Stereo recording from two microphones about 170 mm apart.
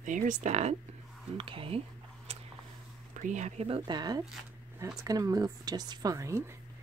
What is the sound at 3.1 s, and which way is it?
A woman's voice, 45° right (ahead or behind).